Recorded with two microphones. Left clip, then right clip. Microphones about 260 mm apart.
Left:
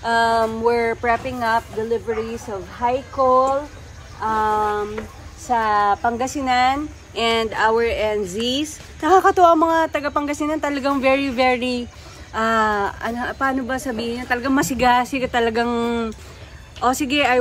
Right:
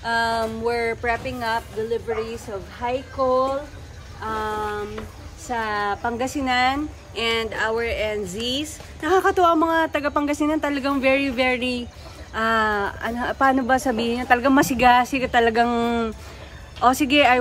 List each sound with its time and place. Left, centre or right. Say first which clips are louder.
0.0 s speech: left 5 dB; centre
4.2 s a sound: left 7 dB; centre
5.5 s a woman's voice: left 7 dB; centre